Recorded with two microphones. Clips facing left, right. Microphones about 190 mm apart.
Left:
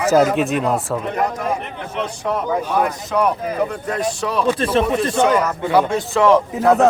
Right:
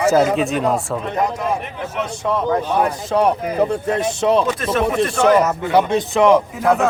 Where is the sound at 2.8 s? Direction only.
30° right (ahead or behind).